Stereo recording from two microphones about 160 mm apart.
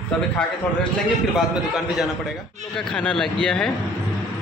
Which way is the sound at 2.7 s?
5° left (ahead or behind).